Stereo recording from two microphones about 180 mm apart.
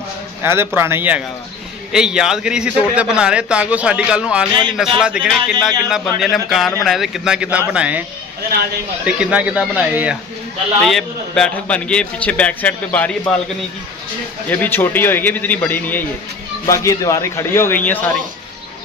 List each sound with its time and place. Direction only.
0.4 s a man's voice: 15° right (ahead or behind)
9.0 s a man's voice: 5° right (ahead or behind); by 13.3 s 10° left (ahead or behind)
14.5 s a man's voice: 10° left (ahead or behind)